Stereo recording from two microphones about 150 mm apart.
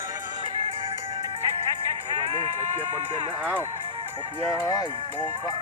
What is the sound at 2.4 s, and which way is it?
Sheep, 50° right (ahead or behind).